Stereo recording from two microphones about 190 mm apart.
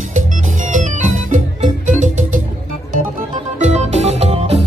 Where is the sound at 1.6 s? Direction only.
40° right (ahead or behind).